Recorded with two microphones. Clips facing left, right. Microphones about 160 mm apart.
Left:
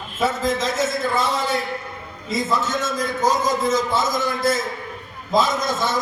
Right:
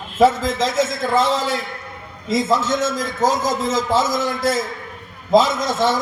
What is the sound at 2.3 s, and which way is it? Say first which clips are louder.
A man's voice: right 4 dB; 90° right.